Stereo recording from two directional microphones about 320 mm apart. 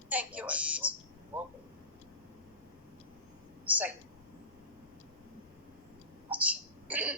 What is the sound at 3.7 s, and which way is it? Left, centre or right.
Speech, centre.